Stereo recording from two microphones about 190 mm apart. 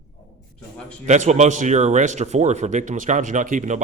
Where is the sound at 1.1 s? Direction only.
35° right (ahead or behind).